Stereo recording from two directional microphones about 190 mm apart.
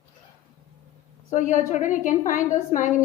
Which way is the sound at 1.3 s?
40° left (ahead or behind).